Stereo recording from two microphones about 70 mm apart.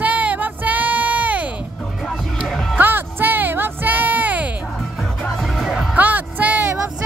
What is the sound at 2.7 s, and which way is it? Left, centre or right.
Music, right.